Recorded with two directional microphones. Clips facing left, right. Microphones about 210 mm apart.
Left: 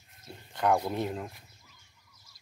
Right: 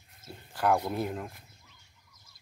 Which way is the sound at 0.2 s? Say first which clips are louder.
Even; 5° right (ahead or behind).